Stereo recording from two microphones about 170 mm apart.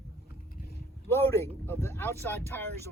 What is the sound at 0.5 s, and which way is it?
Vehicle, 70° left (ahead or behind).